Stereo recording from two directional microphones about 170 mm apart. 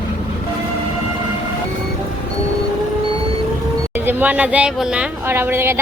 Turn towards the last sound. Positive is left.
turn(degrees=-15)  # may be behind; listen again after turning